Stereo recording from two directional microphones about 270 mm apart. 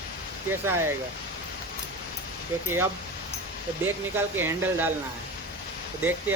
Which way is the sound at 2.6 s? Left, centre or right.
Centre.